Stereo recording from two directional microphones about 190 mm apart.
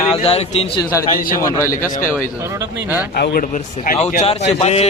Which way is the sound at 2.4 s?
15° right (ahead or behind).